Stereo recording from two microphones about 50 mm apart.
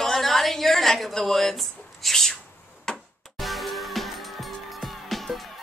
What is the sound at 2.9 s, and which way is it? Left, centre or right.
Music, centre.